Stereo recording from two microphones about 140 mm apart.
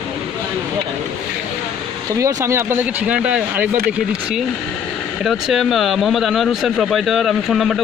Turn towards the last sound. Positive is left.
turn(degrees=0)  # may be behind; listen again after turning